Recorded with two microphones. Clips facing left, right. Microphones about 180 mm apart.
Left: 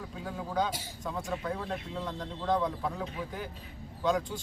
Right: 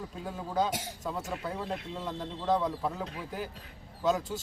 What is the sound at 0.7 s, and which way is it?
Speech, 80° right.